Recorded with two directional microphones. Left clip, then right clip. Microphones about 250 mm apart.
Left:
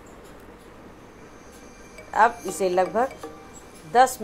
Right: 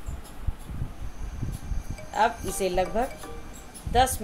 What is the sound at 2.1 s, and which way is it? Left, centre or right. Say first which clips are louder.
Speech: left 5 dB; left.